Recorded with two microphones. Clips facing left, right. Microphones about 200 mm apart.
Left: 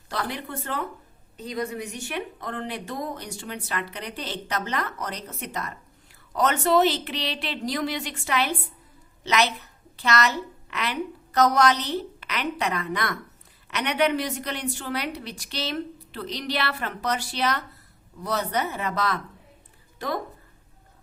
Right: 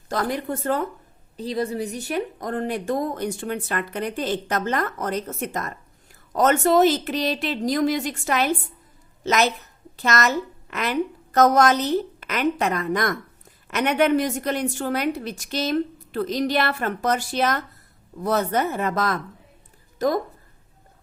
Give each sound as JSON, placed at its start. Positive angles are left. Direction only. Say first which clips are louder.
{"t": 0.1, "sound": "speech", "louder": "right 6 dB", "side_deg": -45}
{"t": 1.4, "sound": "a woman's voice", "louder": "right 5 dB", "side_deg": -35}